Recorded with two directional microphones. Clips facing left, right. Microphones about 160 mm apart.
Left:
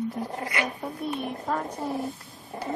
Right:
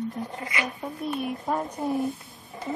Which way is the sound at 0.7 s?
Centre (ahead or behind).